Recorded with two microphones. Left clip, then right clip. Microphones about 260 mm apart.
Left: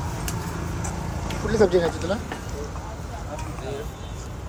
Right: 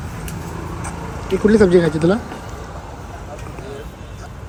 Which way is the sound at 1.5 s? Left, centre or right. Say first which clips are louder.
Right 5 dB; centre.